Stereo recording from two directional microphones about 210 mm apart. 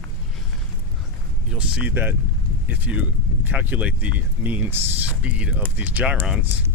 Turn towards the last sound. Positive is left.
turn(degrees=-5)  # may be behind; listen again after turning